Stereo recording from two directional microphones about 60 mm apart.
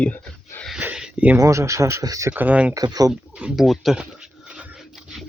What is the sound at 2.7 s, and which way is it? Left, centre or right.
Speech, right.